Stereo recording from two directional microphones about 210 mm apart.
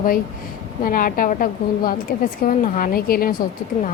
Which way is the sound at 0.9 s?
40° left (ahead or behind).